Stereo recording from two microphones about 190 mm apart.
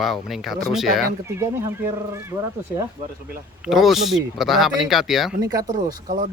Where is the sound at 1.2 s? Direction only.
15° right (ahead or behind).